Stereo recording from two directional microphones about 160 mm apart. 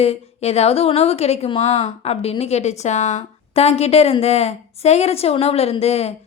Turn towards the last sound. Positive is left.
turn(degrees=40)  # may be behind; listen again after turning